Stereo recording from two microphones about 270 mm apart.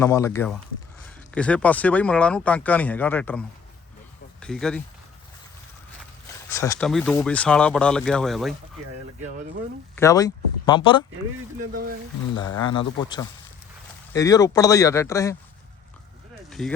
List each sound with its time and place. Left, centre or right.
0.0 s speech: centre
6.5 s speech: centre
9.9 s speech: centre
11.7 s speech: right
12.4 s speech: centre
16.5 s a sound: centre